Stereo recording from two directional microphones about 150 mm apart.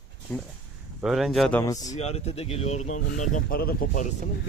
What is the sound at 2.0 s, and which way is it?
Speech, 45° left (ahead or behind).